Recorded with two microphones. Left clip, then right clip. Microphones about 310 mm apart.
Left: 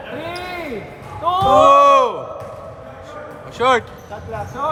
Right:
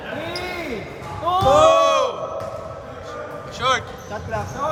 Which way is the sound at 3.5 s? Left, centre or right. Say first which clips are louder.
Left 5 dB; left.